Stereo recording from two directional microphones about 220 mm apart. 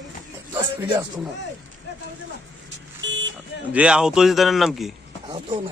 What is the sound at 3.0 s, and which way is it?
Vehicle, 55° right (ahead or behind).